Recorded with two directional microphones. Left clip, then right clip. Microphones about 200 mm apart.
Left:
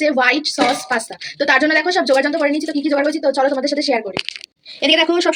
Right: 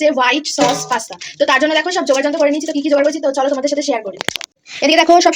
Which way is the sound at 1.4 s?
15° left (ahead or behind).